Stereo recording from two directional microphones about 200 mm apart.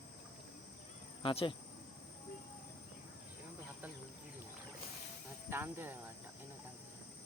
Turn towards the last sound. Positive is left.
turn(degrees=-10)  # may be behind; listen again after turning